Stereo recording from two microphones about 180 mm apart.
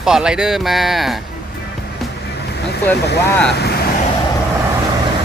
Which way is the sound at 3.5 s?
65° left (ahead or behind).